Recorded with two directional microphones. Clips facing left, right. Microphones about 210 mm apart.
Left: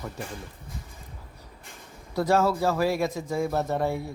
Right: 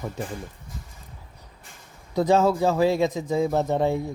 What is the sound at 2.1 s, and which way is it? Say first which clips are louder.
Speech: right 3 dB; 20° right (ahead or behind).